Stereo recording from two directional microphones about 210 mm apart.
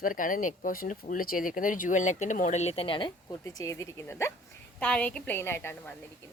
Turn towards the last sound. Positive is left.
turn(degrees=10)  # may be behind; listen again after turning